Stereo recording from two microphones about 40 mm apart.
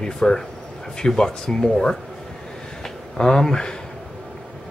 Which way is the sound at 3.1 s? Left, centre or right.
Centre.